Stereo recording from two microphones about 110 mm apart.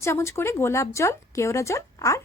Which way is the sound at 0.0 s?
25° left (ahead or behind).